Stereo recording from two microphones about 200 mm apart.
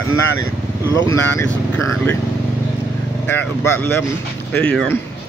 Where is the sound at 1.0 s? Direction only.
10° left (ahead or behind).